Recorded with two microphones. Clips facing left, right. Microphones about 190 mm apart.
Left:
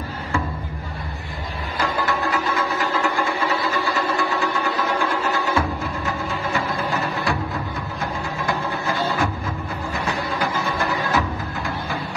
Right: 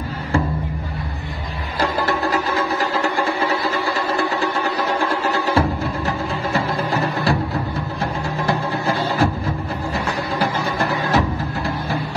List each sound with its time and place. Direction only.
1.8 s music: 35° right (ahead or behind)
3.0 s a sound: 35° right (ahead or behind)
4.2 s music: 35° right (ahead or behind)
11.1 s music: 35° right (ahead or behind)